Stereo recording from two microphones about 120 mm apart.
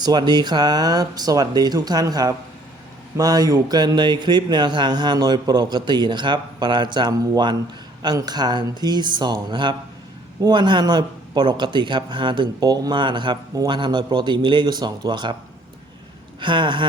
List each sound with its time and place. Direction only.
0.0 s speech: 35° right (ahead or behind)
16.4 s speech: 40° right (ahead or behind)